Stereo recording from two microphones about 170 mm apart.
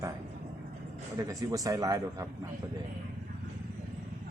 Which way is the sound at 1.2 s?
20° right (ahead or behind).